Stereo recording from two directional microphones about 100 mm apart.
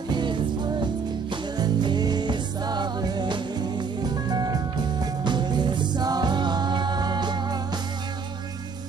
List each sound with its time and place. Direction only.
0.1 s music: 50° right (ahead or behind)